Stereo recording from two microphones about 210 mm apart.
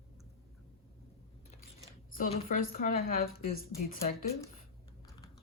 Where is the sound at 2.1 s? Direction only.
40° left (ahead or behind).